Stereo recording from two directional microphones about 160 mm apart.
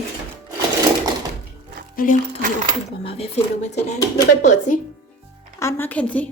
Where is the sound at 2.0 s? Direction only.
65° left (ahead or behind).